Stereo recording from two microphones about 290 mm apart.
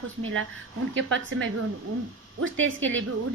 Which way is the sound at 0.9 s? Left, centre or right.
Right.